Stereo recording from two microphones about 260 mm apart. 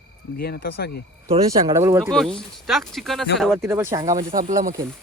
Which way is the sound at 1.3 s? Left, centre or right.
Centre.